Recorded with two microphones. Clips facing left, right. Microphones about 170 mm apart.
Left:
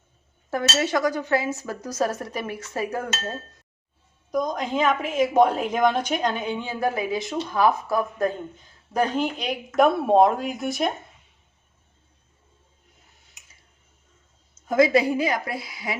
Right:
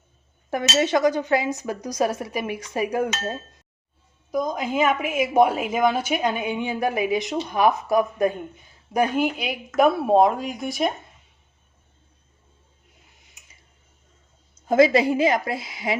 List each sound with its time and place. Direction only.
0.5 s a woman's voice: 20° right (ahead or behind)
4.3 s a woman's voice: 5° right (ahead or behind)
14.7 s a woman's voice: 25° right (ahead or behind)